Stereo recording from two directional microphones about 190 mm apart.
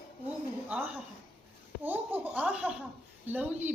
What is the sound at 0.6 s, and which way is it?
A woman's voice, 10° right (ahead or behind).